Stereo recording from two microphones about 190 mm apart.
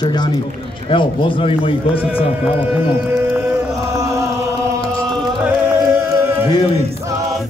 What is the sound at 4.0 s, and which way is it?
Chant, 15° right (ahead or behind).